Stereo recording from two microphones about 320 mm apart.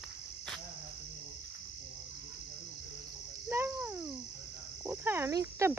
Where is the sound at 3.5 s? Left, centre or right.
Centre.